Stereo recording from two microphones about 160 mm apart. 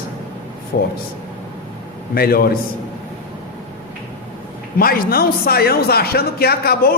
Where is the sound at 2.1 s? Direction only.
70° left (ahead or behind).